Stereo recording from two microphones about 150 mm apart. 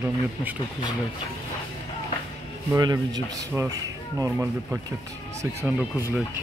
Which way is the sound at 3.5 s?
20° right (ahead or behind).